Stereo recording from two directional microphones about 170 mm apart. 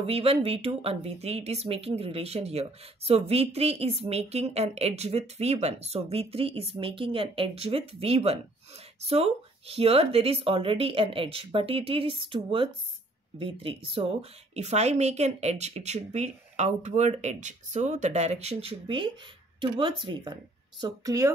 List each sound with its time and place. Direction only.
0.0 s speech: 35° right (ahead or behind)